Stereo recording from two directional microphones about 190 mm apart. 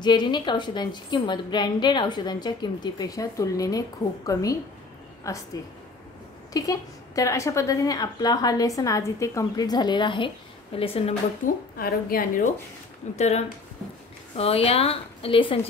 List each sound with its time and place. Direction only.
0.0 s a woman's voice: 25° left (ahead or behind)
6.5 s a woman's voice: 20° left (ahead or behind)
11.4 s a woman's voice: 50° left (ahead or behind)
13.1 s speech: 35° left (ahead or behind)